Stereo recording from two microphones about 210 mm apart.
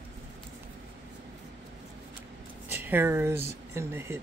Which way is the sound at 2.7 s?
10° right (ahead or behind).